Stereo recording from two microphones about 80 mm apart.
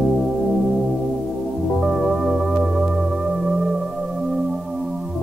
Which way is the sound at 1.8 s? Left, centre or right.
Centre.